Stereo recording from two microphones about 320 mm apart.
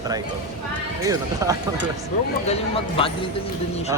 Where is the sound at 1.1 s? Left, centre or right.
Centre.